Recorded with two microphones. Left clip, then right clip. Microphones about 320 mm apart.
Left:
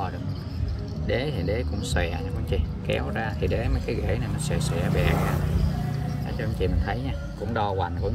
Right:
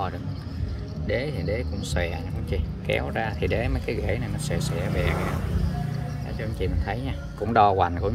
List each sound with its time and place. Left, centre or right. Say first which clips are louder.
1.0 s speech: even; centre
5.1 s speech: left 2 dB; left
6.4 s speech: left 1 dB; centre
7.5 s speech: right 8 dB; centre